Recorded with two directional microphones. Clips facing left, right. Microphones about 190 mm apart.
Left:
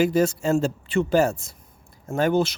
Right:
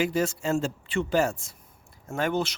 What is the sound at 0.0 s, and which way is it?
Speech, 40° left (ahead or behind).